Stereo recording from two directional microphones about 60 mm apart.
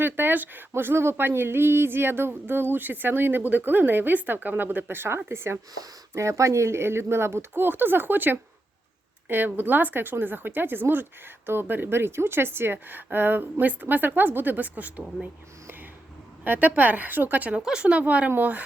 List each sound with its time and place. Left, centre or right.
0.0 s speech: right
6.1 s speech: right
16.4 s a woman's voice: right
17.6 s a woman's voice: centre; by 18.6 s right